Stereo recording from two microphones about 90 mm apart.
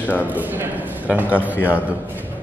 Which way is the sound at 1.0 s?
15° right (ahead or behind).